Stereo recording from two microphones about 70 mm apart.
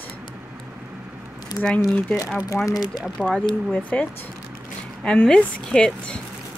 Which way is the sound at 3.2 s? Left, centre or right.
Left.